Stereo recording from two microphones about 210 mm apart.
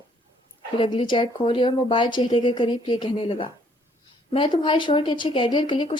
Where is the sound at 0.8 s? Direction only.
25° left (ahead or behind).